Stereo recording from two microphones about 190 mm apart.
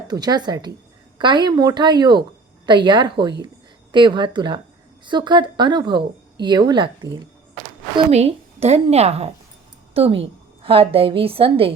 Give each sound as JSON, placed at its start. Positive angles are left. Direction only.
{"t": 0.1, "sound": "a woman's voice", "side_deg": -20}
{"t": 7.9, "sound": "a woman's voice", "side_deg": -35}